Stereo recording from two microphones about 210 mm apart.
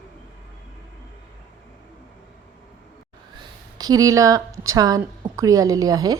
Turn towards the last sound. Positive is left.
turn(degrees=-20)  # may be behind; listen again after turning